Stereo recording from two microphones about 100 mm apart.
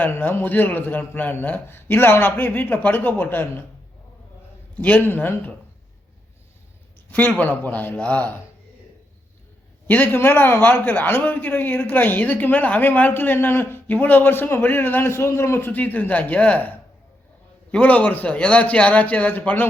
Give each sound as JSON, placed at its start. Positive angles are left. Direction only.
{"t": 0.0, "sound": "a man's voice", "side_deg": 20}
{"t": 4.7, "sound": "a man's voice", "side_deg": 15}
{"t": 7.1, "sound": "a man's voice", "side_deg": 15}
{"t": 9.8, "sound": "a man's voice", "side_deg": 20}